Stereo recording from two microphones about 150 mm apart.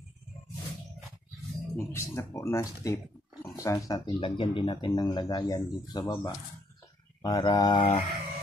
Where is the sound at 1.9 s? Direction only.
20° left (ahead or behind).